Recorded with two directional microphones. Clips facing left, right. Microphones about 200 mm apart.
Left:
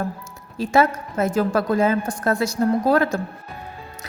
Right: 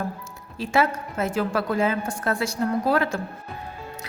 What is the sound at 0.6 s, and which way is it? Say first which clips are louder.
A woman's voice: left 4 dB; 45° left (ahead or behind).